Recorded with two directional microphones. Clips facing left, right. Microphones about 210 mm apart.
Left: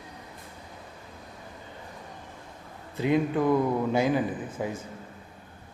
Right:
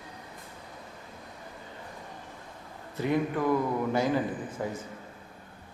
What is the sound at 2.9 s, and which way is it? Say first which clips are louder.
A man's voice: left 3 dB; 15° left (ahead or behind).